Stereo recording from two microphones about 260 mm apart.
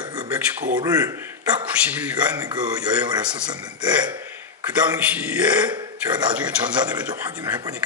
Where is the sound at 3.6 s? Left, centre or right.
Centre.